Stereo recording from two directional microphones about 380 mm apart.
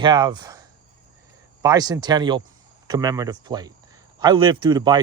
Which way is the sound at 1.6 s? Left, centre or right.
Centre.